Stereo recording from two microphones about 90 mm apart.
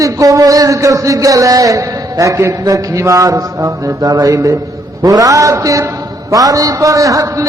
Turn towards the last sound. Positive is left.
turn(degrees=-40)  # may be behind; listen again after turning